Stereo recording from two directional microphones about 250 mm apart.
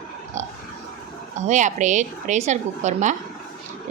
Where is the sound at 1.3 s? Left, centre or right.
Right.